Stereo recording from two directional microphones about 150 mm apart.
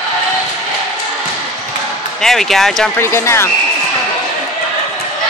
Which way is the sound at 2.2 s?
Centre (ahead or behind).